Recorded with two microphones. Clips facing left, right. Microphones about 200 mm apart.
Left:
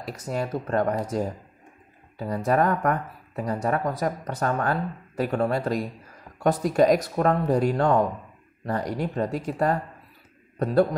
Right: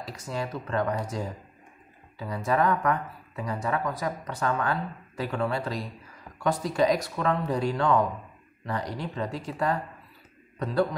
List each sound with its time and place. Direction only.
0.0 s speech: 50° left (ahead or behind)